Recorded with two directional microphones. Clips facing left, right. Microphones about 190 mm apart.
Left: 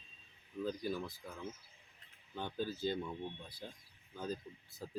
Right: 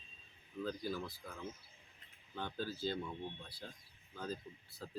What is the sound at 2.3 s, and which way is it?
Speech, 15° left (ahead or behind).